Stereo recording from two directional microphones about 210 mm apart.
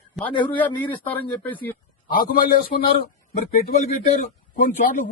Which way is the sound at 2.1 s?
45° left (ahead or behind).